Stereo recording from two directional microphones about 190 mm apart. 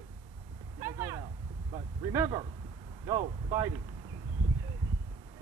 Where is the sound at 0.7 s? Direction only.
15° right (ahead or behind).